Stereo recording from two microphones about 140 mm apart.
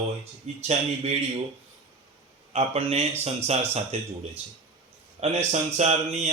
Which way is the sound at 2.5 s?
50° right (ahead or behind).